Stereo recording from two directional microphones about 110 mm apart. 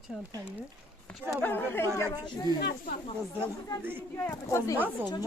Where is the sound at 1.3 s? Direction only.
20° left (ahead or behind).